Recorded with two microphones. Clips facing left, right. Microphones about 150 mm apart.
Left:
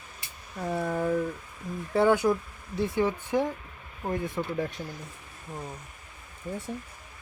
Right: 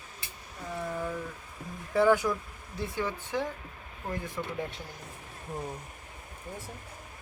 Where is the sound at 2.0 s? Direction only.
20° left (ahead or behind).